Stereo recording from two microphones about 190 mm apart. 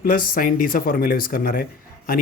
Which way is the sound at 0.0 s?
50° left (ahead or behind).